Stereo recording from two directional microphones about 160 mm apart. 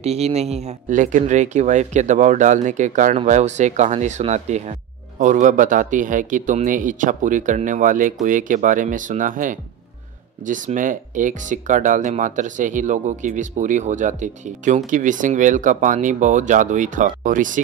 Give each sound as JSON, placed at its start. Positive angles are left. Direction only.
{"t": 0.0, "sound": "speech", "side_deg": -40}